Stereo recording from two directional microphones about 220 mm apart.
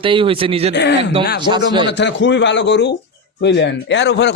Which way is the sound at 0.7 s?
50° left (ahead or behind).